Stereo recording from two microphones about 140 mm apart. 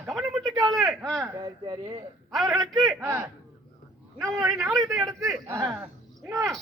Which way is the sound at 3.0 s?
20° right (ahead or behind).